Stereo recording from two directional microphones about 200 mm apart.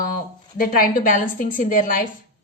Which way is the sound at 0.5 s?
40° left (ahead or behind).